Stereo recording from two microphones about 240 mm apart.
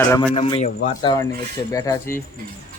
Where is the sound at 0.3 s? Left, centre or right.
Left.